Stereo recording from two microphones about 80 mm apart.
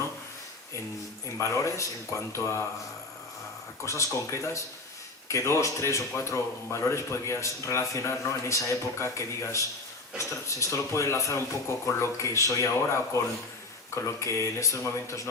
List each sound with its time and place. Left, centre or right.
1.4 s speech: left
3.8 s speech: left